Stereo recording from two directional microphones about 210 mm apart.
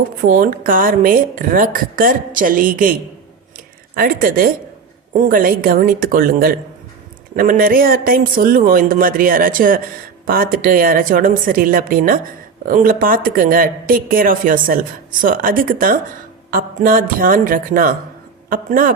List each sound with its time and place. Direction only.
0.3 s speech: 40° right (ahead or behind)
3.9 s speech: 40° right (ahead or behind)